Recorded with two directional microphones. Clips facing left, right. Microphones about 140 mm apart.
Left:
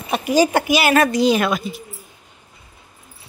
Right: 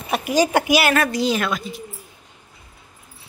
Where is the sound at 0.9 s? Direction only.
20° left (ahead or behind).